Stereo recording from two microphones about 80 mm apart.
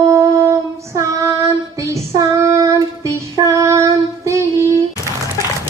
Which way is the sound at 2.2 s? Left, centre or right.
Right.